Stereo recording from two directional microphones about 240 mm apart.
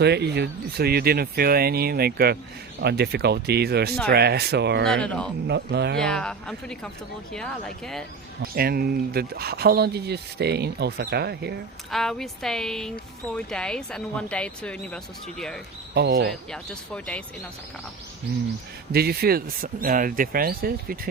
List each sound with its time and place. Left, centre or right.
0.0 s speech: right
4.9 s speech: centre
5.5 s speech: right
6.0 s speech: centre
8.5 s speech: right
11.9 s speech: centre
16.0 s speech: right
16.5 s speech: centre
18.9 s speech: right